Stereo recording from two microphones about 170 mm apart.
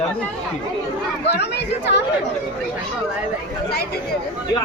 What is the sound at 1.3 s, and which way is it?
Speech, 90° left.